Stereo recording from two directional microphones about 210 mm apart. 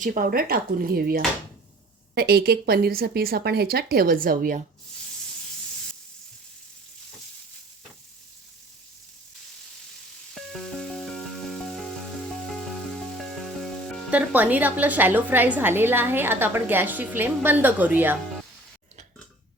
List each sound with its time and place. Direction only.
0.0 s a woman's voice: 40° right (ahead or behind)
10.3 s music: centre (ahead or behind)